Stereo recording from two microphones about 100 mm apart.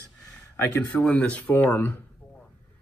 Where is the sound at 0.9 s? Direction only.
15° left (ahead or behind).